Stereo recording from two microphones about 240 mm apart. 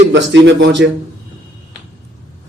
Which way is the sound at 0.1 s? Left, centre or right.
Right.